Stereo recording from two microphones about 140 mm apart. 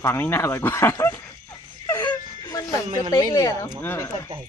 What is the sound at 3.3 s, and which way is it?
Speech, 25° left (ahead or behind).